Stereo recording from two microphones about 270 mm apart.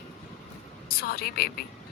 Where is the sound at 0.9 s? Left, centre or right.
Left.